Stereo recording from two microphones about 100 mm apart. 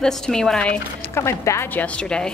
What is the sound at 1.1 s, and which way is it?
Speech, 25° left (ahead or behind).